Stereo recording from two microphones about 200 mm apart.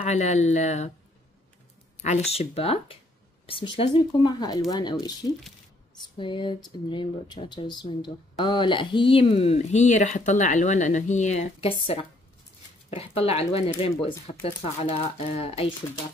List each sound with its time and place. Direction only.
0.0 s speech: 35° left (ahead or behind)
2.0 s speech: 35° left (ahead or behind)
6.1 s speech: 25° left (ahead or behind)